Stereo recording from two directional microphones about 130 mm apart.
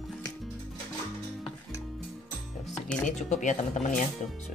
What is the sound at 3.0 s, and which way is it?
Speech, 65° left (ahead or behind).